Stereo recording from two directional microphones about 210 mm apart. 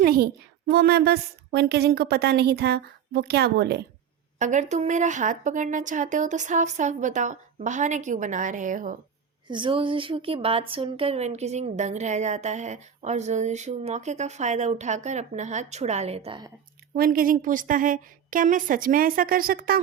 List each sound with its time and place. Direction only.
0.0 s a sound: 45° right (ahead or behind)
0.7 s a woman's voice: 50° right (ahead or behind)
4.4 s a woman's voice: 35° right (ahead or behind)
9.5 s a woman's voice: 25° right (ahead or behind)
16.9 s a woman's voice: 45° right (ahead or behind)